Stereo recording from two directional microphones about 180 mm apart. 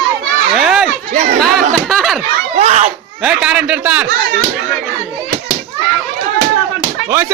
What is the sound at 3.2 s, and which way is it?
Speech, 5° right (ahead or behind).